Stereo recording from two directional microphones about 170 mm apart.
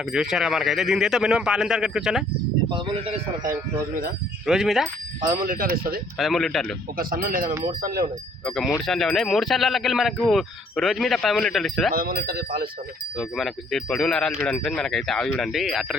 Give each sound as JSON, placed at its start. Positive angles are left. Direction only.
{"t": 0.0, "sound": "speech", "side_deg": 0}
{"t": 2.6, "sound": "speech", "side_deg": -30}
{"t": 4.4, "sound": "speech", "side_deg": 0}
{"t": 5.3, "sound": "speech", "side_deg": -55}
{"t": 6.1, "sound": "speech", "side_deg": 0}
{"t": 6.9, "sound": "speech", "side_deg": -55}
{"t": 8.4, "sound": "speech", "side_deg": 0}
{"t": 11.9, "sound": "speech", "side_deg": -60}
{"t": 13.1, "sound": "speech", "side_deg": 0}